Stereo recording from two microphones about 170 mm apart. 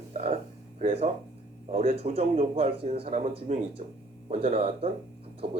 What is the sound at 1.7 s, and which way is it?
Speech, 35° right (ahead or behind).